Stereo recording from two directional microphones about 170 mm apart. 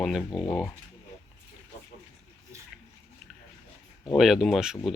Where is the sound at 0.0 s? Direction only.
Centre (ahead or behind).